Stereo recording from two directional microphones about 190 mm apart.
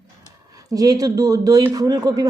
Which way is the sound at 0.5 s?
20° right (ahead or behind).